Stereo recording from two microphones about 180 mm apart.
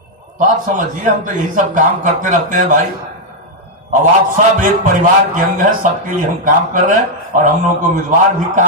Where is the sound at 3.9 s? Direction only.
45° right (ahead or behind).